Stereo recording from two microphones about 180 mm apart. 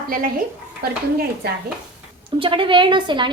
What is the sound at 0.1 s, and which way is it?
Speech, 50° right (ahead or behind).